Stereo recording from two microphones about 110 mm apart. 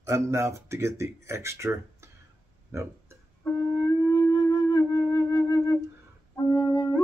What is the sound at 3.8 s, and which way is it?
Wind instrument, 35° left (ahead or behind).